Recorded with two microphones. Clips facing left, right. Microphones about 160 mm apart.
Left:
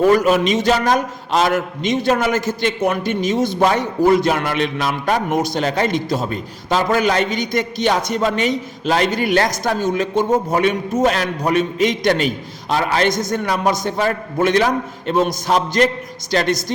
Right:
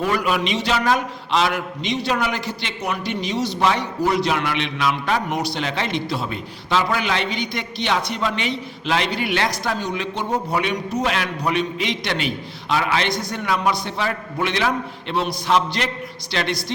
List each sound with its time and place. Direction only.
0.0 s a man's voice: 40° left (ahead or behind)